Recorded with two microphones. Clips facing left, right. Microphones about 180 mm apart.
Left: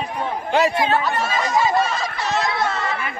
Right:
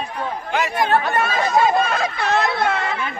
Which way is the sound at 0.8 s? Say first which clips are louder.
Right 1 dB; 50° right (ahead or behind).